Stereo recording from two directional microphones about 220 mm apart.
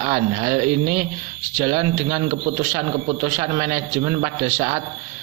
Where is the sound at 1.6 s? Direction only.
25° right (ahead or behind).